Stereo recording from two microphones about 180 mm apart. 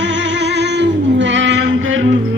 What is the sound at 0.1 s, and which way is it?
Music, 75° right (ahead or behind).